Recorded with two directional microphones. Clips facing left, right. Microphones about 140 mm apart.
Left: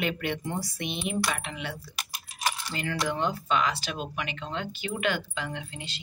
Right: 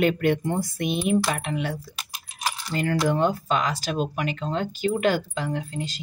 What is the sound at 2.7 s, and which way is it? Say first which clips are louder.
Speech: right 10 dB; 45° right (ahead or behind).